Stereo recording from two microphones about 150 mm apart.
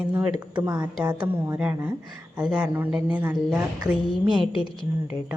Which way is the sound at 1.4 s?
15° right (ahead or behind).